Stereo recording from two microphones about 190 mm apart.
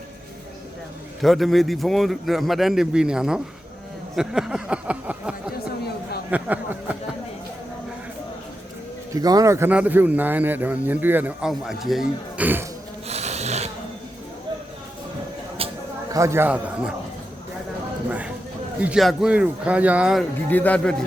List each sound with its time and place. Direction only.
1.2 s a man's voice: centre (ahead or behind)
6.3 s speech: 10° right (ahead or behind)
9.1 s speech: 20° right (ahead or behind)
13.1 s a sound: 35° right (ahead or behind)
16.1 s speech: 15° right (ahead or behind)
18.8 s a man's voice: 5° right (ahead or behind)
20.5 s speech: 10° left (ahead or behind)